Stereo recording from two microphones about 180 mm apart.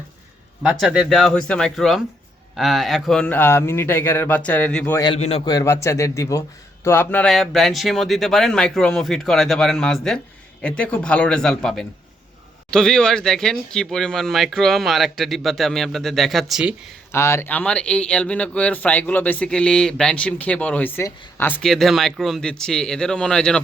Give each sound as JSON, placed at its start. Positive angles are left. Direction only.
{"t": 0.6, "sound": "a man's voice", "side_deg": -5}
{"t": 5.1, "sound": "a man's voice", "side_deg": 35}
{"t": 5.5, "sound": "a man's voice", "side_deg": 20}
{"t": 17.1, "sound": "a man's voice", "side_deg": 15}
{"t": 21.6, "sound": "speech", "side_deg": 0}